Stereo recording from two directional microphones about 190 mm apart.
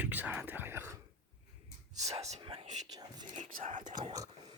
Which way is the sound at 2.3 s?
30° right (ahead or behind).